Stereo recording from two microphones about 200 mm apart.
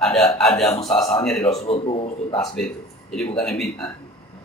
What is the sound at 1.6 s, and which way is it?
Speech, 30° left (ahead or behind).